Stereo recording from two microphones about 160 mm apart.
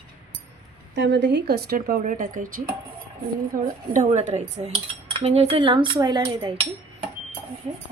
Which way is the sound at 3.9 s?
45° right (ahead or behind).